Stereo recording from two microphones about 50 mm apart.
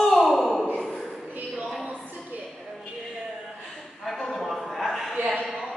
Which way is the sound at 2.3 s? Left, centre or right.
Right.